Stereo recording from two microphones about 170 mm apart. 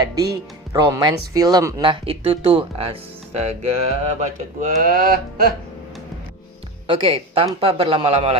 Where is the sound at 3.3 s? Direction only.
40° right (ahead or behind); by 5.5 s 60° right (ahead or behind).